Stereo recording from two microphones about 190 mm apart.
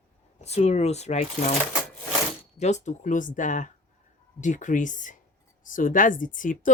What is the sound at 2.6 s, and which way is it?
A woman's voice, 35° left (ahead or behind).